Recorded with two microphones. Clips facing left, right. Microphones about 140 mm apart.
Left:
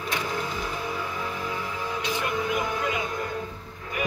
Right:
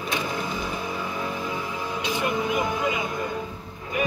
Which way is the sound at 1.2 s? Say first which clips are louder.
Right 2 dB; 15° right (ahead or behind).